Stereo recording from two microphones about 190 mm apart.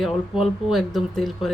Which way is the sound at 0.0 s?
Centre (ahead or behind).